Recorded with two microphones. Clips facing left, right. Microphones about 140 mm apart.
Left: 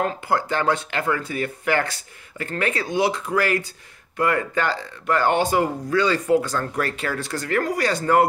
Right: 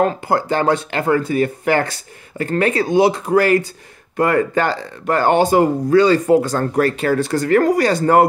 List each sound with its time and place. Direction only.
0.0 s speech: 35° right (ahead or behind)